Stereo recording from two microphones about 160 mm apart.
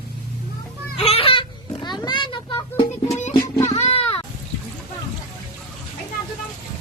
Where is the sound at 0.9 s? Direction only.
40° left (ahead or behind).